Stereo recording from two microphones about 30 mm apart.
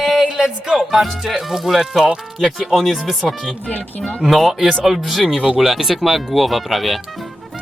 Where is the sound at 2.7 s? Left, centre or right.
Centre.